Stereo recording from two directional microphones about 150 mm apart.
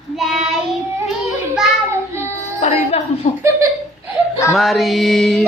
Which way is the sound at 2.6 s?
45° left (ahead or behind).